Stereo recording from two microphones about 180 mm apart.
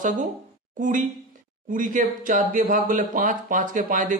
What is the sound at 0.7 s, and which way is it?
A man's voice, 45° right (ahead or behind).